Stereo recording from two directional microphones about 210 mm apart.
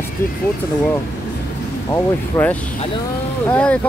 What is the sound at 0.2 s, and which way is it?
Speech, 10° left (ahead or behind).